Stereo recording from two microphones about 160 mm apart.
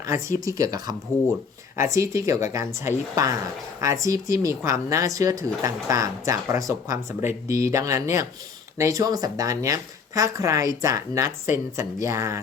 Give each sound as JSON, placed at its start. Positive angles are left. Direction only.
{"t": 0.0, "sound": "speech", "side_deg": -20}